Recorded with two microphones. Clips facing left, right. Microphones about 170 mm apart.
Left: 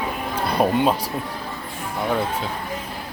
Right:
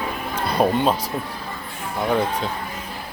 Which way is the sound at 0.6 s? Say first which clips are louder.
Even; 10° left (ahead or behind).